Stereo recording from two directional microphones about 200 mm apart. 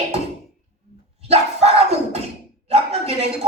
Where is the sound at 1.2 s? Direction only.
30° right (ahead or behind).